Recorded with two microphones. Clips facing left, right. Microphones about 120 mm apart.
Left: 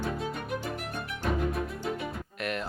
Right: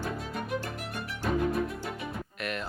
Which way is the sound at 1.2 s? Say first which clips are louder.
Right 2 dB; centre (ahead or behind).